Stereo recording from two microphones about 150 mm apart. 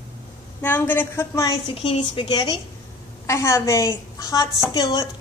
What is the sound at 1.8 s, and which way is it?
Speech, 35° left (ahead or behind).